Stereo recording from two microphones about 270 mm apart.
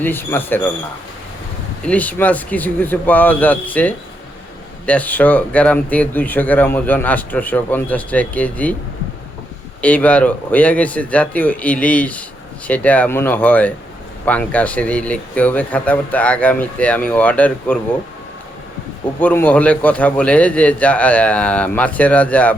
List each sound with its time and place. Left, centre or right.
0.0 s speech: centre
1.9 s speech: centre
9.8 s speech: centre
19.2 s speech: centre